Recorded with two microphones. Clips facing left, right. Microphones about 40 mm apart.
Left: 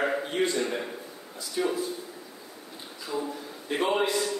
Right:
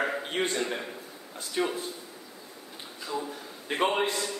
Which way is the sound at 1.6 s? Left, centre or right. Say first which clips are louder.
Left 1 dB; right.